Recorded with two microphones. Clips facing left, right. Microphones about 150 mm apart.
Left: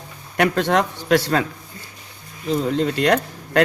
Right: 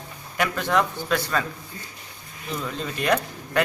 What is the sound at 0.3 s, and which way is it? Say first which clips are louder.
Speech: left 5 dB; 70° left (ahead or behind).